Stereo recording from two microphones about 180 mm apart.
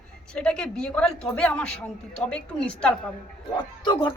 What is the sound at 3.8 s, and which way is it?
Speech, 25° left (ahead or behind).